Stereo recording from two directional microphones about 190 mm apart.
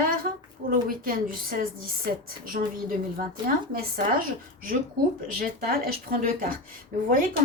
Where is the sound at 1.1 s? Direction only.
50° right (ahead or behind).